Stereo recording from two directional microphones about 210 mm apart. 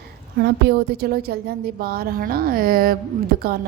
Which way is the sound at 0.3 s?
50° right (ahead or behind).